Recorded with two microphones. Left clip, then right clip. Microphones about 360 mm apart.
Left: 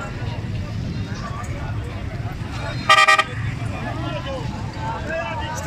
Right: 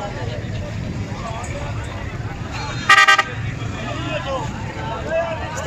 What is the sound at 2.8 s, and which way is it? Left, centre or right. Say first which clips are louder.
Vehicle: right 2 dB; centre.